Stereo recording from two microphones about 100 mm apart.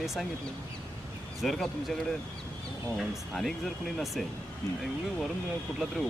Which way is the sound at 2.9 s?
Centre (ahead or behind).